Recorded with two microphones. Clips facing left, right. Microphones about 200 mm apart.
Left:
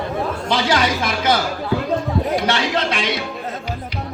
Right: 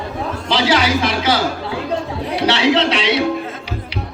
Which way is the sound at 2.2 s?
45° left (ahead or behind).